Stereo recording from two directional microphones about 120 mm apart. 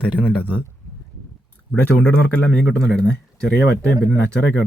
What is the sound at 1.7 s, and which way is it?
Speech, 10° left (ahead or behind).